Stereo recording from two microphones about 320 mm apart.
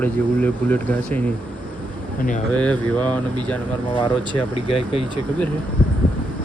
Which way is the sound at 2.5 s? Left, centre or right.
Centre.